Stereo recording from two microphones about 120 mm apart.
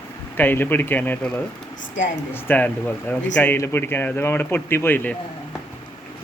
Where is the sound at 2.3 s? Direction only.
15° left (ahead or behind).